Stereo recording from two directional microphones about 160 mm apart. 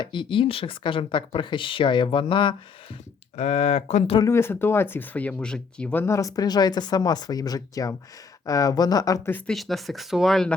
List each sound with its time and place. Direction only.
0.0 s speech: 30° left (ahead or behind)
3.3 s speech: 45° left (ahead or behind)
4.2 s speech: 15° left (ahead or behind)
9.5 s speech: centre (ahead or behind)